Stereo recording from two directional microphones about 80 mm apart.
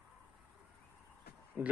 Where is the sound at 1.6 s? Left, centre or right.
Right.